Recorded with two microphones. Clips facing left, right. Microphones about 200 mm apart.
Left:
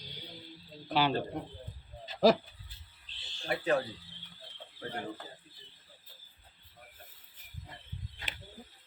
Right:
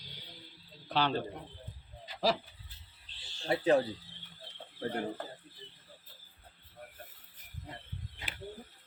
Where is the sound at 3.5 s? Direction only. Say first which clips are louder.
Right 3 dB; 30° right (ahead or behind).